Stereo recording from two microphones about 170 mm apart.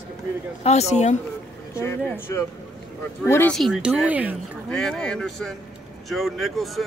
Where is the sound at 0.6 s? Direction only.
40° left (ahead or behind).